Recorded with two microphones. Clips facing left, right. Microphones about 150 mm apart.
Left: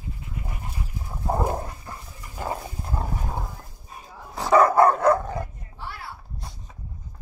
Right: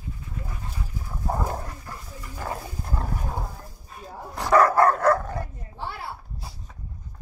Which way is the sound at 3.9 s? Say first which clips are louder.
Right 1 dB; 10° left (ahead or behind).